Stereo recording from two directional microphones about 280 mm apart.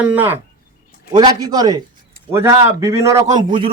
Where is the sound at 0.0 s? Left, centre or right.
Centre.